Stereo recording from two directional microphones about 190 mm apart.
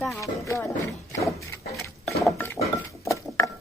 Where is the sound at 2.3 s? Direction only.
10° left (ahead or behind).